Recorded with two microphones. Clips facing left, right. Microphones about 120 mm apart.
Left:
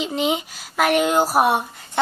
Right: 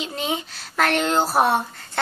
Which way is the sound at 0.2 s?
15° left (ahead or behind).